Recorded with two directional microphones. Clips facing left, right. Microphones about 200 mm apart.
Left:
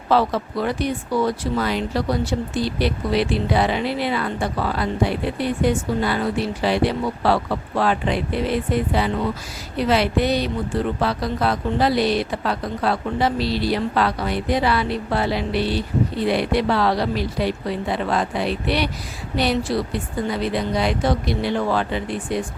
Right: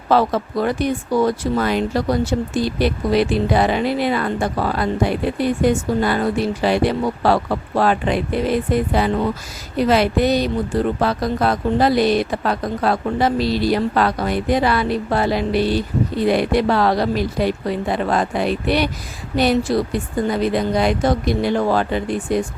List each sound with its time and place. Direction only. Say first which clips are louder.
0.1 s speech: right 2 dB; 45° right (ahead or behind)